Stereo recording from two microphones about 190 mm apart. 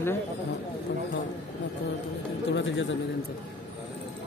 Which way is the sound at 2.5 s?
70° left (ahead or behind).